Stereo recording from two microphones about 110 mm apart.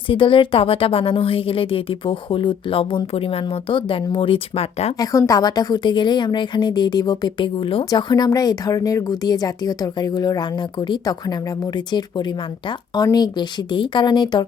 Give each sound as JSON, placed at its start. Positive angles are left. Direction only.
{"t": 0.1, "sound": "a woman's voice", "side_deg": 50}
{"t": 4.9, "sound": "speech", "side_deg": 30}
{"t": 7.9, "sound": "speech", "side_deg": 35}